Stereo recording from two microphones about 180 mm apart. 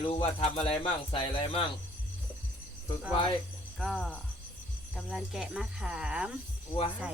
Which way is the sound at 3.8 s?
Centre (ahead or behind).